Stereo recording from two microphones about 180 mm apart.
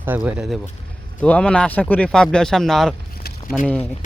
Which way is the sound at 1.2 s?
5° left (ahead or behind).